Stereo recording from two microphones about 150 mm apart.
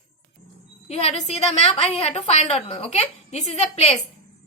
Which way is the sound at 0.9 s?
45° left (ahead or behind).